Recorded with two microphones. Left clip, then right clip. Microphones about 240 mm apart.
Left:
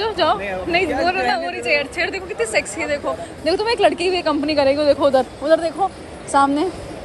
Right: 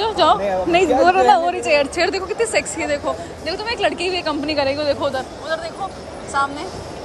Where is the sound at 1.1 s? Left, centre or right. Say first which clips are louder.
Right 6 dB; centre.